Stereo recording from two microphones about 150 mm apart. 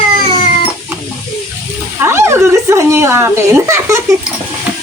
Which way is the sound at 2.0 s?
15° right (ahead or behind).